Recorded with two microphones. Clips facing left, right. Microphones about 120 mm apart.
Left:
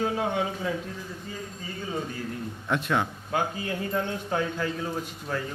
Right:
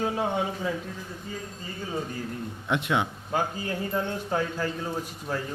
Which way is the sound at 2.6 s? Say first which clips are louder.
Even; 20° right (ahead or behind).